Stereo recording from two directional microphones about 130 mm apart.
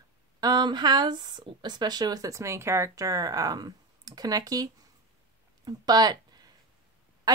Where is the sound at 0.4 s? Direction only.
30° right (ahead or behind).